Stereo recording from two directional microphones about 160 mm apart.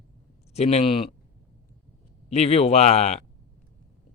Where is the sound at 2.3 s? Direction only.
40° left (ahead or behind).